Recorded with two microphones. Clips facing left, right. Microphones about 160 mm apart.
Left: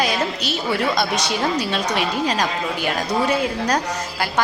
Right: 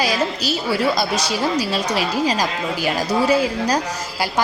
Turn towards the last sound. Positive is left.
turn(degrees=-5)  # may be behind; listen again after turning